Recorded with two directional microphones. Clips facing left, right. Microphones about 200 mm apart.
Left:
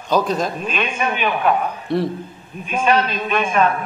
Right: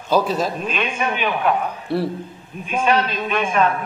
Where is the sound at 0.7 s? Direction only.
50° left (ahead or behind).